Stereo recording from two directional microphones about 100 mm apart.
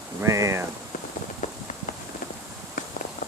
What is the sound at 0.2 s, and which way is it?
Speech, 30° right (ahead or behind).